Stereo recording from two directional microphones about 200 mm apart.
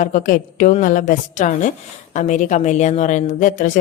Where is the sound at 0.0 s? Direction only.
40° left (ahead or behind).